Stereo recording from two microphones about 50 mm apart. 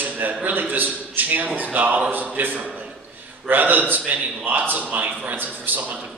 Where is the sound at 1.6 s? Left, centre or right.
Right.